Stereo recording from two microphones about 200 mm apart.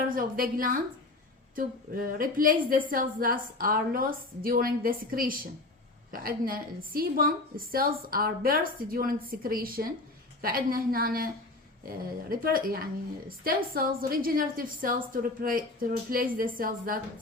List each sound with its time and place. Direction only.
0.1 s a woman's voice: 45° right (ahead or behind)